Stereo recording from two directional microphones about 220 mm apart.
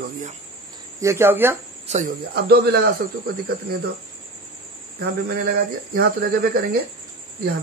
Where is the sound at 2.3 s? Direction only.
45° right (ahead or behind).